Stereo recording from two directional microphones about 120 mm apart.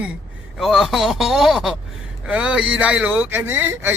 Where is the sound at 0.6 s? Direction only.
Centre (ahead or behind).